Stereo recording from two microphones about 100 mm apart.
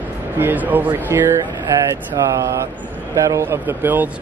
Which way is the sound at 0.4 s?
20° right (ahead or behind).